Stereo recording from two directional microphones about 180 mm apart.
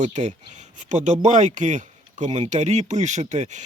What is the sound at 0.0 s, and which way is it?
Speech, 40° right (ahead or behind).